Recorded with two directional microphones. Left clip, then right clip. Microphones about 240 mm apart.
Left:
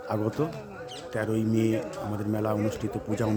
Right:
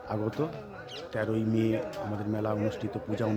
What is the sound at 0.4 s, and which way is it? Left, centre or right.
Speech, centre.